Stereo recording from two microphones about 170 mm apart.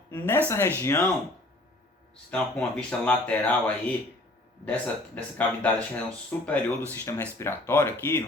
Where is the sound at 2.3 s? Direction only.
5° left (ahead or behind).